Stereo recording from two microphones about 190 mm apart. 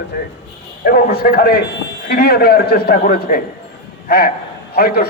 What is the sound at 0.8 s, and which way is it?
A man's voice, 50° left (ahead or behind).